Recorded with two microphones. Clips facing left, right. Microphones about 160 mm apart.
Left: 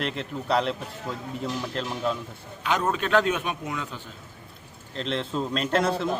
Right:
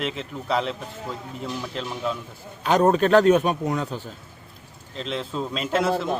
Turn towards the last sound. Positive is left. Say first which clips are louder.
# even
turn(degrees=-5)  # may be behind; listen again after turning